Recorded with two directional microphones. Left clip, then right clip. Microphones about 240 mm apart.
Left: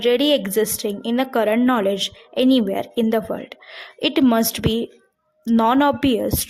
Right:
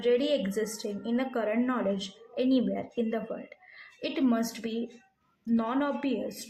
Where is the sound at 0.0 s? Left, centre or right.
Left.